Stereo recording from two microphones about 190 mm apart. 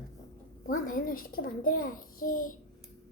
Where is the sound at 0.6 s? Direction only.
45° left (ahead or behind).